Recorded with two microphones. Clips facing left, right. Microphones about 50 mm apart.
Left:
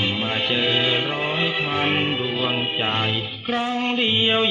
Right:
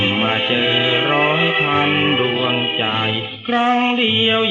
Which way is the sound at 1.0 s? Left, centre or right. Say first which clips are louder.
Right 8 dB; right.